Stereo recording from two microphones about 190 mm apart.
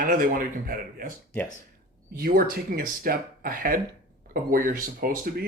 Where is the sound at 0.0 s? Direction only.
45° right (ahead or behind).